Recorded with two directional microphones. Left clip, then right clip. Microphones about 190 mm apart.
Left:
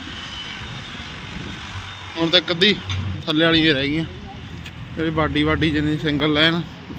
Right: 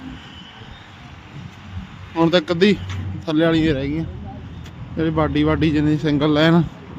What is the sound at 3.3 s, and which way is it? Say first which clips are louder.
Speech: left 1 dB; 20° right (ahead or behind).